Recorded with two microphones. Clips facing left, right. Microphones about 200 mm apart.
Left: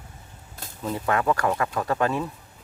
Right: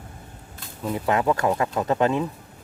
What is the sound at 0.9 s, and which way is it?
Speech, 20° right (ahead or behind).